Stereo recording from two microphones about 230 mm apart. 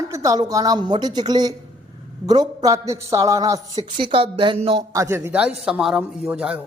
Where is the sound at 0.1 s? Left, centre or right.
Centre.